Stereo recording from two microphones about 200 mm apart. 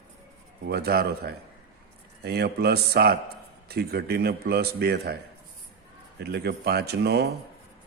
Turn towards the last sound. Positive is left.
turn(degrees=-55)  # may be behind; listen again after turning